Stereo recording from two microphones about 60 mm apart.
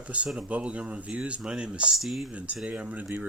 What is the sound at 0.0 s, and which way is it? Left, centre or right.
Speech, right.